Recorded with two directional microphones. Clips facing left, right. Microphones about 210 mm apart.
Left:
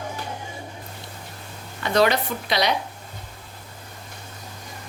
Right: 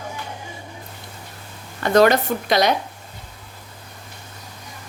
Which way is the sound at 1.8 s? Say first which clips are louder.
Right 5 dB; 50° right (ahead or behind).